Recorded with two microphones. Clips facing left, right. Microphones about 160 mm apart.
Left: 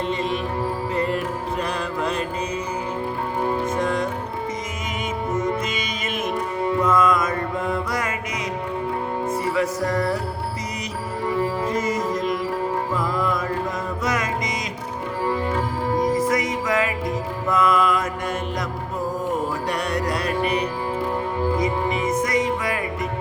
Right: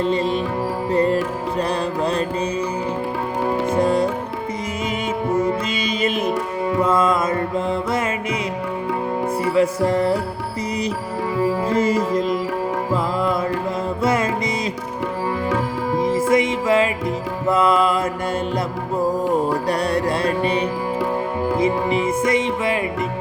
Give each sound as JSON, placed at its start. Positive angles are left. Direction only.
{"t": 0.0, "sound": "music", "side_deg": -35}
{"t": 3.7, "sound": "music", "side_deg": -30}
{"t": 5.8, "sound": "music", "side_deg": -30}
{"t": 9.6, "sound": "music", "side_deg": -30}
{"t": 11.6, "sound": "music", "side_deg": -30}
{"t": 16.0, "sound": "music", "side_deg": -25}
{"t": 19.2, "sound": "music", "side_deg": -35}